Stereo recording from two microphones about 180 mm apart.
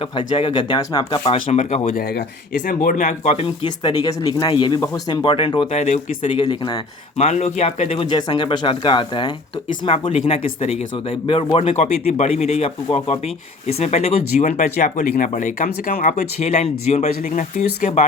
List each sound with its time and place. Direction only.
0.0 s speech: 30° left (ahead or behind)
5.8 s speech: 40° left (ahead or behind)
6.3 s speech: 30° left (ahead or behind)
7.2 s speech: 40° left (ahead or behind)